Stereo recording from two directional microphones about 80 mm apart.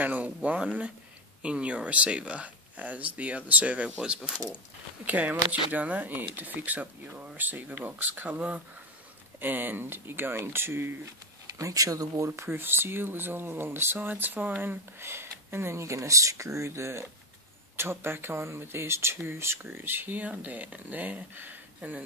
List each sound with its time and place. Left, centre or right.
0.0 s speech: centre
11.5 s speech: right
12.3 s speech: right